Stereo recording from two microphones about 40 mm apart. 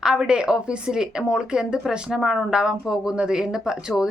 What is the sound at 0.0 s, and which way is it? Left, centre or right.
Speech, centre.